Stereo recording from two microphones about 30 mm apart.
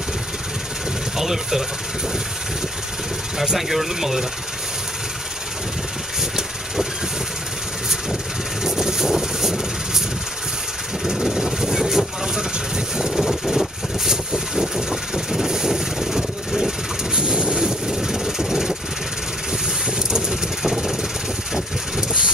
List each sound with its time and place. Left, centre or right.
1.1 s speech: centre
3.5 s speech: centre
8.6 s vehicle: centre
11.1 s vehicle: centre
17.1 s vehicle: right
17.8 s vehicle: centre
20.1 s vehicle: centre